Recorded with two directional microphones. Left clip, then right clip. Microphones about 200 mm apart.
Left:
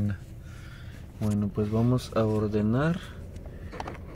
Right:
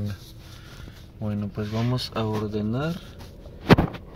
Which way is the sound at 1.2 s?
Centre (ahead or behind).